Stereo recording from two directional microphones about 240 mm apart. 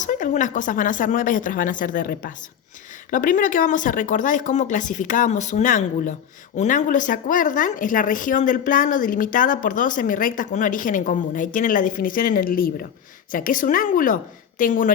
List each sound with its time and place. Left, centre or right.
0.0 s a woman's voice: left